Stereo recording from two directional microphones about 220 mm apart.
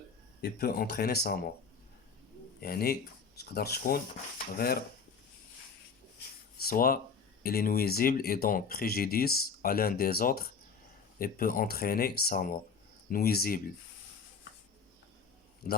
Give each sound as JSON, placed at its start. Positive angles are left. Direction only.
{"t": 0.4, "sound": "speech", "side_deg": 45}
{"t": 2.6, "sound": "speech", "side_deg": 45}
{"t": 6.6, "sound": "speech", "side_deg": 45}